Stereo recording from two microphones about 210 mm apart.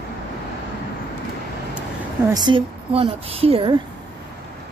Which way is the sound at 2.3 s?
20° right (ahead or behind).